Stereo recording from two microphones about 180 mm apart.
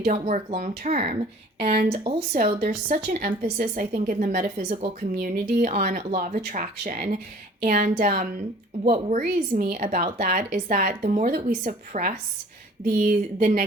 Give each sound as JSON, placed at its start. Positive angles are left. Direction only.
{"t": 0.0, "sound": "speech", "side_deg": -45}
{"t": 0.9, "sound": "speech", "side_deg": -35}
{"t": 5.1, "sound": "speech", "side_deg": -55}